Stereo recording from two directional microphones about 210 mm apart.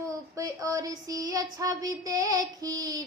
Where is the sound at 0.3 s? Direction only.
15° right (ahead or behind).